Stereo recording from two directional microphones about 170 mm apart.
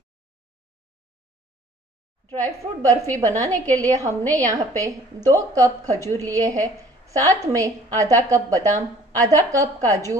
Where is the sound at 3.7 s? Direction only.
20° right (ahead or behind).